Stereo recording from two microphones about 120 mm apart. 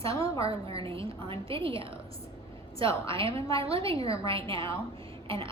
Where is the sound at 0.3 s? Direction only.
50° right (ahead or behind).